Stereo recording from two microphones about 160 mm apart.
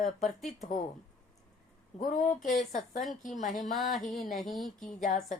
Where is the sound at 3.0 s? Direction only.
Centre (ahead or behind).